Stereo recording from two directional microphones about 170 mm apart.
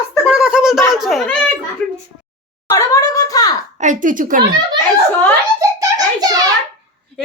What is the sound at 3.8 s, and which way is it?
Speech, 50° right (ahead or behind).